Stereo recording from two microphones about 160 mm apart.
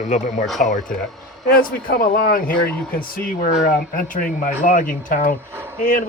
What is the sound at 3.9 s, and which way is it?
Speech, 55° left (ahead or behind).